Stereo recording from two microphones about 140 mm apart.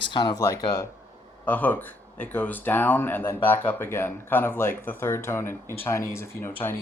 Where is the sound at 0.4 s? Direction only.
25° left (ahead or behind).